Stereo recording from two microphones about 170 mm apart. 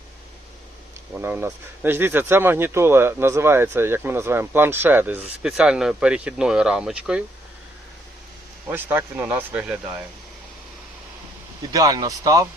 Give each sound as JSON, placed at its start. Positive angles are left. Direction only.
{"t": 1.1, "sound": "speech", "side_deg": -10}
{"t": 8.6, "sound": "speech", "side_deg": -10}
{"t": 11.7, "sound": "speech", "side_deg": -20}